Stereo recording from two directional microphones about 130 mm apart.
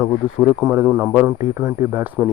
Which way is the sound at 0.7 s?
20° right (ahead or behind).